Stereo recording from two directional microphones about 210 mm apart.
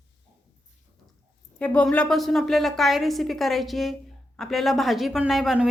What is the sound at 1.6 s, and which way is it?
A woman's voice, 5° left (ahead or behind).